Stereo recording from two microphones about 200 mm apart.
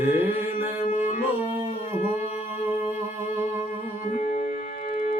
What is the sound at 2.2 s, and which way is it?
Music, 30° left (ahead or behind).